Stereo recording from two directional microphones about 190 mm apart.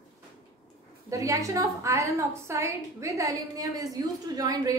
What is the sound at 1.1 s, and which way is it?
A woman's voice, 15° right (ahead or behind).